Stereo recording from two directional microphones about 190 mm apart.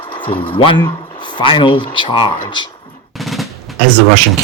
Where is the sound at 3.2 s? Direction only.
Centre (ahead or behind).